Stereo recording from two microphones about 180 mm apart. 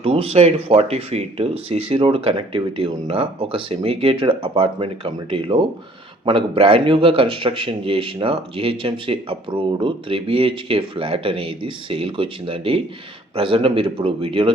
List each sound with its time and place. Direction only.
0.0 s speech: 30° right (ahead or behind)